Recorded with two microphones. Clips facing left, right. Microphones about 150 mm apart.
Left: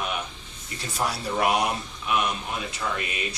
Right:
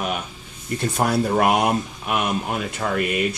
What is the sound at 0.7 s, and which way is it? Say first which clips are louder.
Speech: right 9 dB; 55° right (ahead or behind).